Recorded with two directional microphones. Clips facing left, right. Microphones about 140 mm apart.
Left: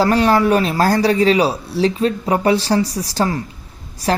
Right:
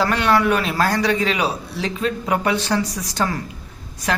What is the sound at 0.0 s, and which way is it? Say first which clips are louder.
A man's voice: left 4 dB; 35° left (ahead or behind).